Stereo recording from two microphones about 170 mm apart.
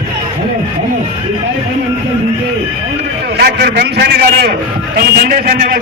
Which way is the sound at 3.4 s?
80° right.